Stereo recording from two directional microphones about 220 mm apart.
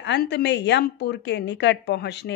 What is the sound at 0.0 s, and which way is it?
Speech, 50° left (ahead or behind).